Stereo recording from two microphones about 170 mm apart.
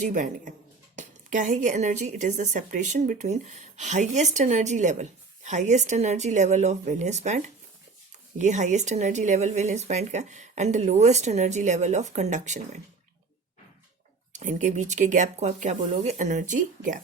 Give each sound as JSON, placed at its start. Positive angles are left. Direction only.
{"t": 0.0, "sound": "a woman's voice", "side_deg": -50}
{"t": 14.3, "sound": "a woman's voice", "side_deg": -45}